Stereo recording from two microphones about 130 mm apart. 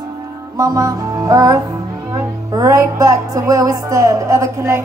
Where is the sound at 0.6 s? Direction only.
25° right (ahead or behind).